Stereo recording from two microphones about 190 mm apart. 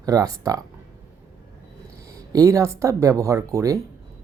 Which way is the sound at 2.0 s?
15° right (ahead or behind).